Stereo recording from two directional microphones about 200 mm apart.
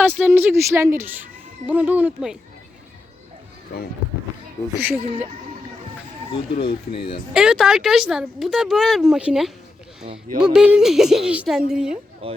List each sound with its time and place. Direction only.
0.2 s a child's voice: 10° right (ahead or behind)
4.8 s a child's voice: 10° right (ahead or behind)
6.9 s speech: 25° left (ahead or behind)
7.3 s speech: centre (ahead or behind)
12.2 s speech: 30° right (ahead or behind)